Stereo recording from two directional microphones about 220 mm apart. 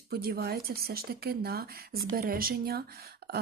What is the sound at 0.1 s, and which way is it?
Speech, 45° right (ahead or behind).